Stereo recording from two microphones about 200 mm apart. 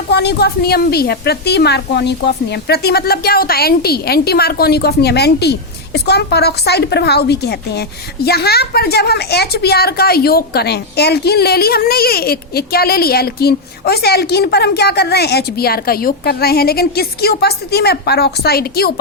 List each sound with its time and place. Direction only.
0.1 s a woman's voice: 55° left (ahead or behind)